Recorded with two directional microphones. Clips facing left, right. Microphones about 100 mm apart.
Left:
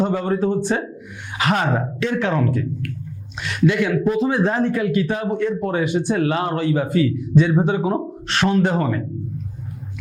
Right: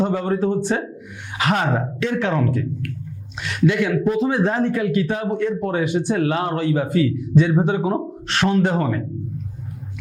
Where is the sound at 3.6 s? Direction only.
20° left (ahead or behind).